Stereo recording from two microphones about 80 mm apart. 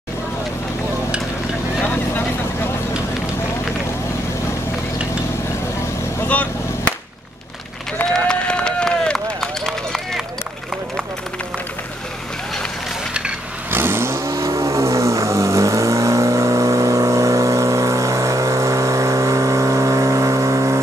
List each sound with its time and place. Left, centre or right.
6.2 s vehicle: centre
8.0 s run: centre
13.7 s vehicle: right